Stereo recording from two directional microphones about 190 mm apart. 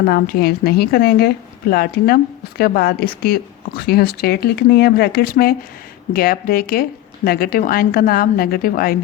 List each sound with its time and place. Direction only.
0.0 s a woman's voice: 55° left (ahead or behind)